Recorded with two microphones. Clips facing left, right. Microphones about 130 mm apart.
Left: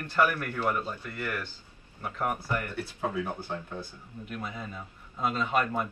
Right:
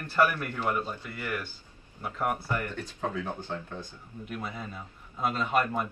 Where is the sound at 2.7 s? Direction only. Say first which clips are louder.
Left 1 dB; 10° left (ahead or behind).